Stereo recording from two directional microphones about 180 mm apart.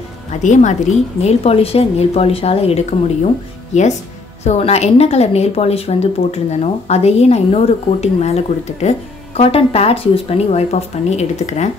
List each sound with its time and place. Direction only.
0.3 s speech: 45° left (ahead or behind)
1.2 s speech: 30° left (ahead or behind)